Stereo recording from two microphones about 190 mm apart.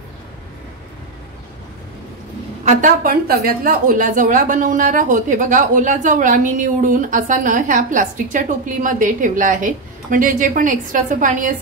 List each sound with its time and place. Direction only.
2.6 s a woman's voice: 40° right (ahead or behind)